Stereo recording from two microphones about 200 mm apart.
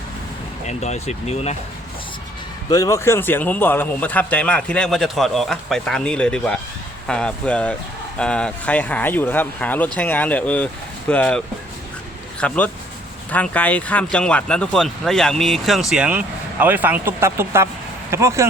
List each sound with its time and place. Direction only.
0.7 s speech: 35° left (ahead or behind)
2.6 s speech: 15° left (ahead or behind); by 18.4 s 15° right (ahead or behind)